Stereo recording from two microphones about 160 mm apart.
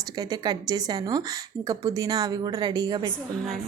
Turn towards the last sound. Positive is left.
turn(degrees=-25)  # may be behind; listen again after turning